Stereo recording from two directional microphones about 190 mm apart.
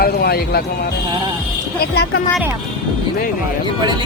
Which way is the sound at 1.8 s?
55° left (ahead or behind).